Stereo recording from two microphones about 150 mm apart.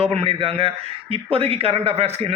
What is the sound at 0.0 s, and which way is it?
A man's voice, 40° right (ahead or behind).